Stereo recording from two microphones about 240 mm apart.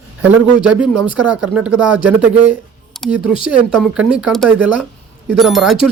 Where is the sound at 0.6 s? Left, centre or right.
Centre.